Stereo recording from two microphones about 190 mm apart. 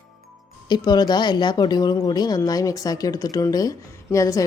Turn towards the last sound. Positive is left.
turn(degrees=15)  # may be behind; listen again after turning